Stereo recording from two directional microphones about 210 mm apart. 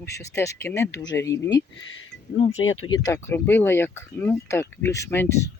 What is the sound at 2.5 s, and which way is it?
Speech, 75° left (ahead or behind).